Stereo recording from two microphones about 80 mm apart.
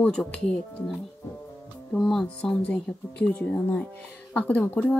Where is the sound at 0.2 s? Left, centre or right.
Centre.